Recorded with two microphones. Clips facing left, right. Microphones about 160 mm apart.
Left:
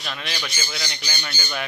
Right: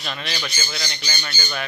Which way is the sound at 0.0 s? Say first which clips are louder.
Right 2 dB; centre (ahead or behind).